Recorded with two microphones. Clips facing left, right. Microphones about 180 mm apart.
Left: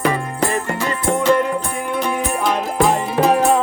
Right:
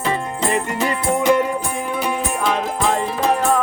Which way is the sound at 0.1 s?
20° right (ahead or behind).